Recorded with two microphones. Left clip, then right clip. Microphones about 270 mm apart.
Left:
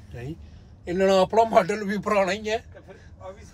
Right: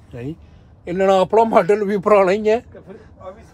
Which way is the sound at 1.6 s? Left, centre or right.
Centre.